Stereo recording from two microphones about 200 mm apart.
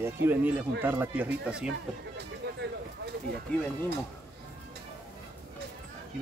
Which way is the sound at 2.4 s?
55° right (ahead or behind).